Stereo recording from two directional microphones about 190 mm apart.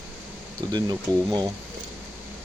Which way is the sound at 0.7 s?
20° right (ahead or behind).